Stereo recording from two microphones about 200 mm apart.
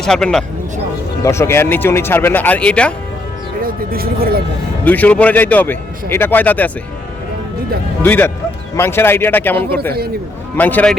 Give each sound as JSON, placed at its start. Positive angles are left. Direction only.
{"t": 0.0, "sound": "speech", "side_deg": 5}
{"t": 1.2, "sound": "speech", "side_deg": 15}
{"t": 3.6, "sound": "speech", "side_deg": -45}
{"t": 4.9, "sound": "speech", "side_deg": 5}
{"t": 8.0, "sound": "speech", "side_deg": 10}